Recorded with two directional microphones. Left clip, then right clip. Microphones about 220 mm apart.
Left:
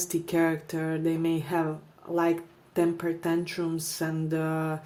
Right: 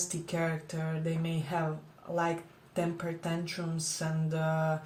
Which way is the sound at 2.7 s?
45° left (ahead or behind).